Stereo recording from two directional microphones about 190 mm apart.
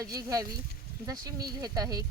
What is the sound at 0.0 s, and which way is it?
Speech, 20° right (ahead or behind).